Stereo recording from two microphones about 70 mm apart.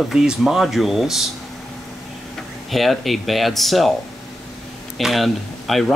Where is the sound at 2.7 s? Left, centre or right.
Centre.